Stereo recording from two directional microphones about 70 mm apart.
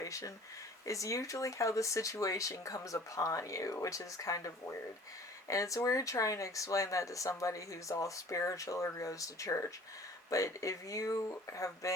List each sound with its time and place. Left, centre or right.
0.0 s speech: left